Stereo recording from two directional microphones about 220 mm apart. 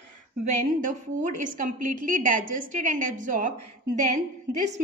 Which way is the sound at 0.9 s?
35° right (ahead or behind).